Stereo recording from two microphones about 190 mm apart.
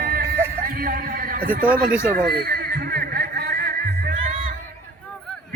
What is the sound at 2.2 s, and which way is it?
Music, 55° right (ahead or behind).